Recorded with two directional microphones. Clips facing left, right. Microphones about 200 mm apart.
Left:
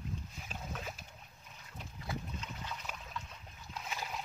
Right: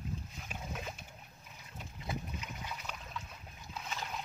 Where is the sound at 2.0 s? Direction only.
15° right (ahead or behind).